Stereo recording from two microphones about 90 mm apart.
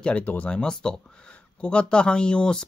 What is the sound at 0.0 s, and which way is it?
Speech, 15° left (ahead or behind).